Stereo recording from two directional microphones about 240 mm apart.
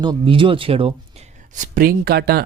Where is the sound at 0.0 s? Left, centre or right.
Centre.